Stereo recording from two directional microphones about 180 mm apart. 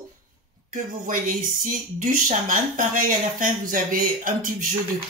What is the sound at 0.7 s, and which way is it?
Speech, 45° right (ahead or behind).